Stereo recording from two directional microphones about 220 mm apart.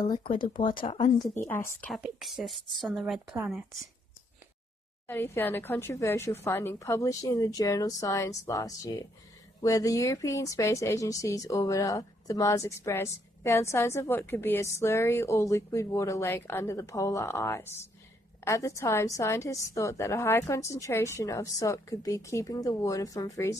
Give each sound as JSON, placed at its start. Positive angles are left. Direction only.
{"t": 0.0, "sound": "speech", "side_deg": 20}
{"t": 1.4, "sound": "speech", "side_deg": 10}
{"t": 2.0, "sound": "speech", "side_deg": 0}
{"t": 5.0, "sound": "speech", "side_deg": 10}